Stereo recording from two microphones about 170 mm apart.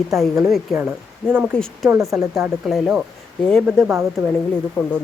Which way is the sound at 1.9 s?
15° right (ahead or behind).